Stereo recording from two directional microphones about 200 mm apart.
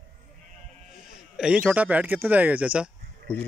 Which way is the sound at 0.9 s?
5° right (ahead or behind).